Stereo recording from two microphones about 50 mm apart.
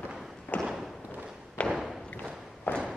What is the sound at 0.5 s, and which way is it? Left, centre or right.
Thump, left.